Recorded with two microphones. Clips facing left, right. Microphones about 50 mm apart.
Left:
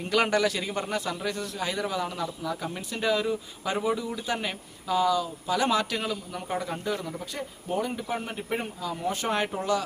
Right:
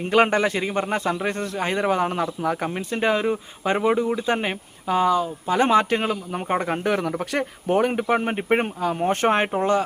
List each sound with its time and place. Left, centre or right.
0.0 s a man's voice: right